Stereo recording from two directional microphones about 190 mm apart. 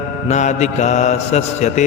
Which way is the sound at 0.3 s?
40° left (ahead or behind).